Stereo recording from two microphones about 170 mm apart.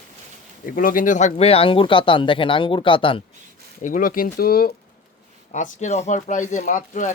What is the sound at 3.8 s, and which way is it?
Speech, 55° left (ahead or behind).